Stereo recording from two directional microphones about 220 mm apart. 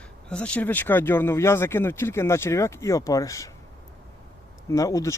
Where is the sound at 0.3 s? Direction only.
5° left (ahead or behind).